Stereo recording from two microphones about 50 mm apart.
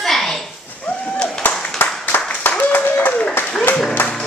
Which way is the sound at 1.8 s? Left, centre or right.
Left.